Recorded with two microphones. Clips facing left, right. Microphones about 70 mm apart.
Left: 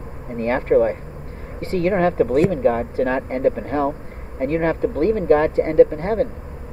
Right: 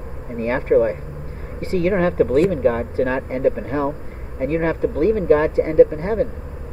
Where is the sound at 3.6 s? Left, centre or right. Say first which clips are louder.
Left 1 dB; centre.